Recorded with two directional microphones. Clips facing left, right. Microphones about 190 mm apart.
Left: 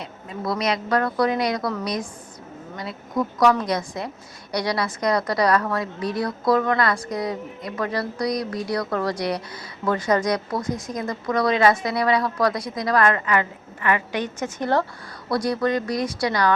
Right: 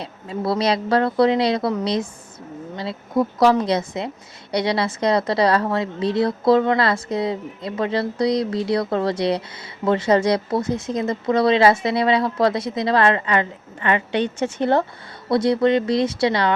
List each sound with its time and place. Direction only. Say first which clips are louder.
0.0 s a woman's voice: right 4 dB; 30° right (ahead or behind)